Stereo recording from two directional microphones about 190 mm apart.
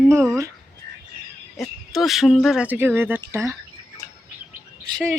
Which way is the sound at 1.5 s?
Centre (ahead or behind).